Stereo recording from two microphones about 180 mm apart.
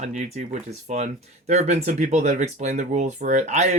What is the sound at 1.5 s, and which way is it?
Speech, 40° right (ahead or behind).